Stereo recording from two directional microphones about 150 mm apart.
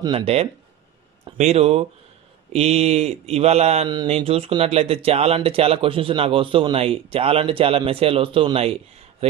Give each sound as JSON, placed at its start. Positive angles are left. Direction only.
{"t": 0.0, "sound": "speech", "side_deg": -40}